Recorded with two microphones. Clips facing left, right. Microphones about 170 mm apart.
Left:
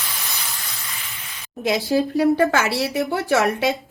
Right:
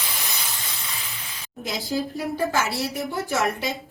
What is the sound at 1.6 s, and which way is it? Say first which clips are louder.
Speech: left 8 dB; 70° left (ahead or behind).